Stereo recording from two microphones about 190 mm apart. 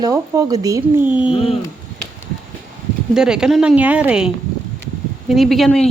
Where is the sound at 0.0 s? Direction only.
20° right (ahead or behind).